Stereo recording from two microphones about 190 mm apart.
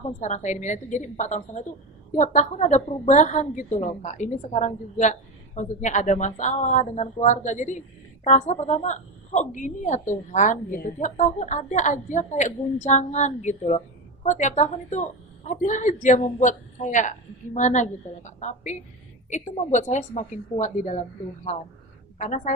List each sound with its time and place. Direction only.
0.2 s a woman's voice: 40° left (ahead or behind)
22.2 s a woman's voice: 40° left (ahead or behind)